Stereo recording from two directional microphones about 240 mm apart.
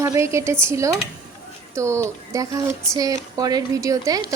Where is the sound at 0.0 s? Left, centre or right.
Centre.